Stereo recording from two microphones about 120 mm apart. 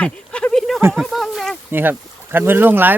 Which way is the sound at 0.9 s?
Centre (ahead or behind).